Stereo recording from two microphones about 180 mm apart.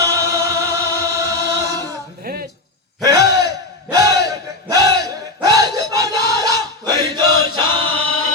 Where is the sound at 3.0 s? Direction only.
20° right (ahead or behind).